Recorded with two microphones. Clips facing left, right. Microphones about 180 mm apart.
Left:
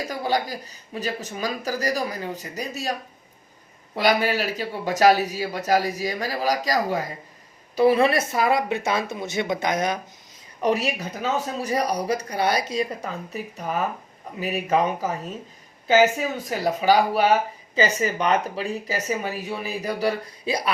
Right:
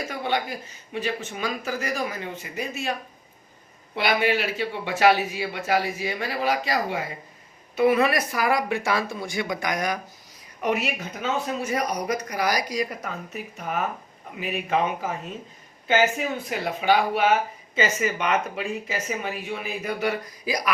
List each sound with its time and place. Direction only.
0.0 s speech: 35° left (ahead or behind)
3.9 s speech: 40° left (ahead or behind); by 10.0 s 25° left (ahead or behind)
10.6 s speech: 35° left (ahead or behind)